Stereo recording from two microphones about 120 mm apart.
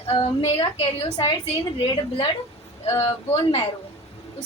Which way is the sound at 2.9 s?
30° left (ahead or behind).